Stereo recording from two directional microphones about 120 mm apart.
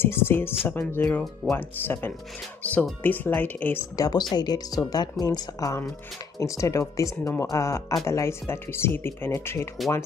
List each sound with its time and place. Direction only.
0.0 s speech: 20° left (ahead or behind)
3.9 s a woman's voice: 30° left (ahead or behind)